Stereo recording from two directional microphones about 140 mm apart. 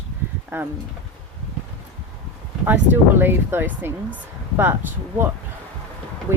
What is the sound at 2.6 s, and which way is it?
Speech, 15° right (ahead or behind).